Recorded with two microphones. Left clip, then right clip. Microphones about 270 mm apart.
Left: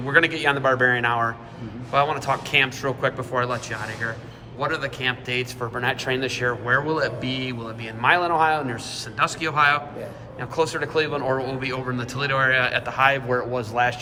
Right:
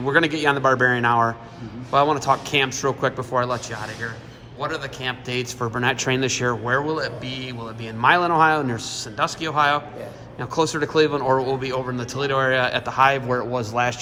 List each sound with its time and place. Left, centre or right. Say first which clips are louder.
0.1 s a man's voice: even; right
5.3 s speech: right 1 dB; right
6.7 s a man's voice: left 1 dB; centre
8.0 s speech: right 2 dB; right
9.1 s a man's voice: even; centre
10.5 s speech: right 2 dB; right